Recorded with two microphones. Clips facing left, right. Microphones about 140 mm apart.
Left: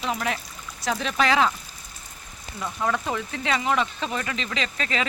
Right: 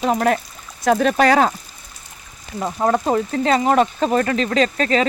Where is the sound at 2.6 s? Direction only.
40° right (ahead or behind).